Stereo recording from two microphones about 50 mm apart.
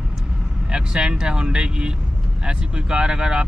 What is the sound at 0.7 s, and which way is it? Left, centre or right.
Speech, centre.